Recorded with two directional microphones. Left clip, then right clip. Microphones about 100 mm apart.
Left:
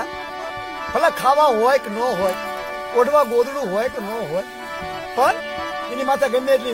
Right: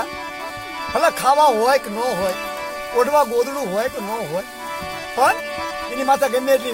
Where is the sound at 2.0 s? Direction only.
40° right (ahead or behind).